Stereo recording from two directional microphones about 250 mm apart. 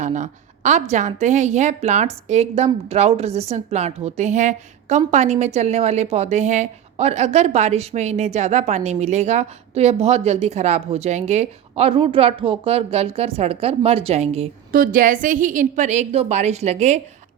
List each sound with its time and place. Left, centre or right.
0.0 s a woman's voice: right